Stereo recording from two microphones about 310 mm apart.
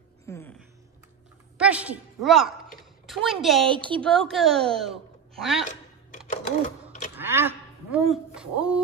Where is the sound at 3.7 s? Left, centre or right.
Centre.